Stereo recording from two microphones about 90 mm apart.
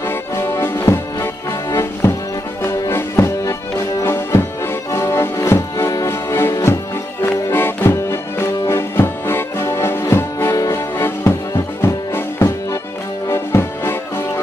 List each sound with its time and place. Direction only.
0.1 s music: 30° left (ahead or behind)